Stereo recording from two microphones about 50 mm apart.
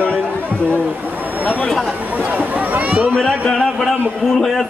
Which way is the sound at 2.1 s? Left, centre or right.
Right.